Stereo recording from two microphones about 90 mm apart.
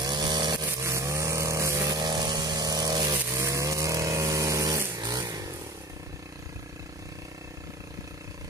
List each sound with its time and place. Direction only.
0.0 s chainsaw: 55° right (ahead or behind)
0.7 s chainsaw: 35° right (ahead or behind)
1.9 s vehicle: 50° right (ahead or behind)
3.3 s vehicle: 35° right (ahead or behind)